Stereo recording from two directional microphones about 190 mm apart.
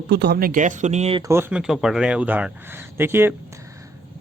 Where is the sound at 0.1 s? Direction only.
60° right (ahead or behind); by 1.2 s 35° right (ahead or behind).